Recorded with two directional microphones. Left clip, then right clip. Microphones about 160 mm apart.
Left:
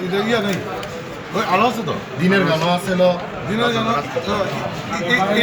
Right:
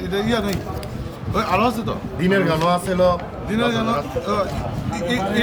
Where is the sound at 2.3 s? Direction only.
25° right (ahead or behind).